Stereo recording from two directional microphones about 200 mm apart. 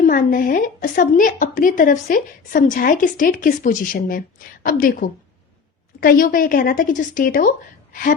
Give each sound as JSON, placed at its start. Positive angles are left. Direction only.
{"t": 0.0, "sound": "a woman's voice", "side_deg": 40}